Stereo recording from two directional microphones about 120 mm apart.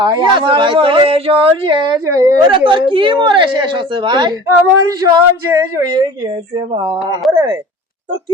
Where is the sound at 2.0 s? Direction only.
25° right (ahead or behind).